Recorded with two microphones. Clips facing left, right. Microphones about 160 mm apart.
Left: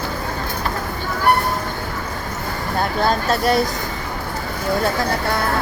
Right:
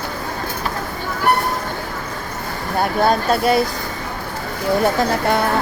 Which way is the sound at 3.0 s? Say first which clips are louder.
Right 2 dB; 10° right (ahead or behind).